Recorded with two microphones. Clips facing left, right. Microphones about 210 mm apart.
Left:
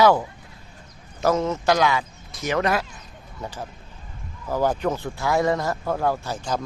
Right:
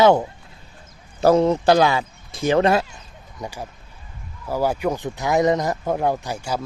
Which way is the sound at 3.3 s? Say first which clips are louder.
Right 2 dB; 10° right (ahead or behind).